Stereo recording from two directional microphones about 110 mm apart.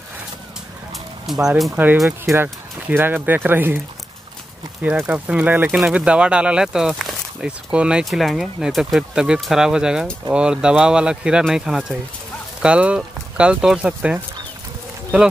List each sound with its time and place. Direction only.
1.2 s speech: centre (ahead or behind)
1.8 s speech: 15° right (ahead or behind)
4.8 s speech: 15° right (ahead or behind)